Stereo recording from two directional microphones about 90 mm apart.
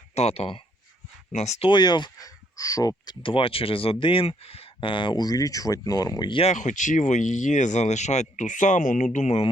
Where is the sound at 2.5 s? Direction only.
40° left (ahead or behind).